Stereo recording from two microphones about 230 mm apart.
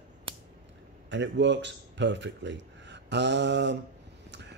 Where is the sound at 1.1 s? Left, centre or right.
Right.